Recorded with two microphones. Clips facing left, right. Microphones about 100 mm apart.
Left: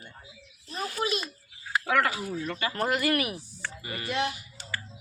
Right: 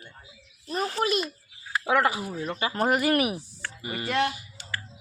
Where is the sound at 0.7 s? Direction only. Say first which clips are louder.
Right 6 dB; 50° right (ahead or behind).